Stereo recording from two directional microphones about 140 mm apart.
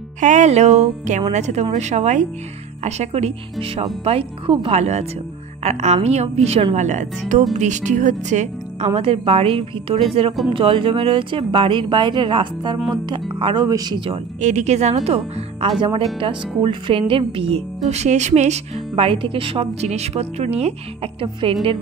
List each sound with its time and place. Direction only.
0.2 s music: 60° right (ahead or behind)
2.8 s speech: 50° right (ahead or behind); by 14.2 s 35° right (ahead or behind)
14.4 s speech: 55° right (ahead or behind)
17.8 s speech: 55° right (ahead or behind)